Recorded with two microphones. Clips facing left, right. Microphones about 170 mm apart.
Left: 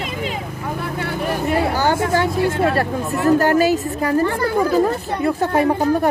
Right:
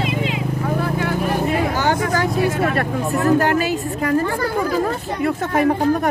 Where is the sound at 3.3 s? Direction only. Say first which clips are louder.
Left 3 dB; 40° left (ahead or behind).